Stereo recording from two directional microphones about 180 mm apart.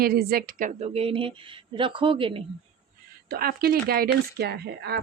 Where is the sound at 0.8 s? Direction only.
35° right (ahead or behind).